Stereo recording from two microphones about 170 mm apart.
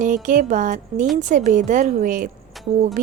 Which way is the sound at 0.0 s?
50° right (ahead or behind).